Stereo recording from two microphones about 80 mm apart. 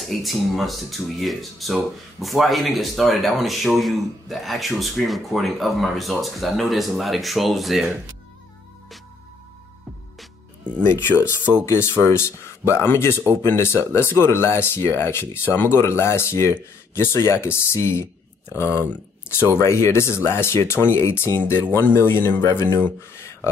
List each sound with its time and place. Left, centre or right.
0.0 s speech: centre
10.9 s speech: left